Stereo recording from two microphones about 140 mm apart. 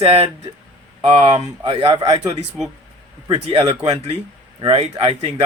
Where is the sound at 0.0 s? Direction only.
45° right (ahead or behind).